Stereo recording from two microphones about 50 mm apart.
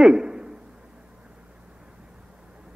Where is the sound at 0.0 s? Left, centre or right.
Centre.